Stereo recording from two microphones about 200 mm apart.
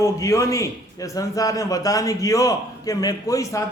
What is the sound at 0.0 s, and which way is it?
A man's voice, 15° left (ahead or behind).